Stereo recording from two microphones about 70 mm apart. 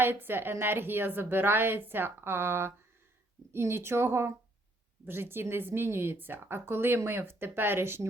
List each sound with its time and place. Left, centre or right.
0.0 s speech: right